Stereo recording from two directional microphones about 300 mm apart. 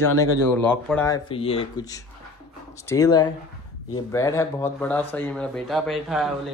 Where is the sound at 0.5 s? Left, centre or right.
Centre.